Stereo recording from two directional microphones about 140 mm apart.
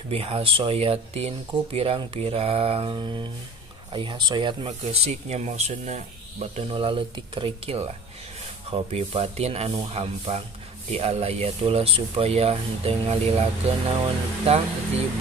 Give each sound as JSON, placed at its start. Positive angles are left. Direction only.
{"t": 0.1, "sound": "speech", "side_deg": -40}